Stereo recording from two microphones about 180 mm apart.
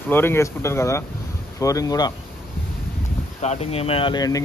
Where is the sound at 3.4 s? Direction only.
35° left (ahead or behind).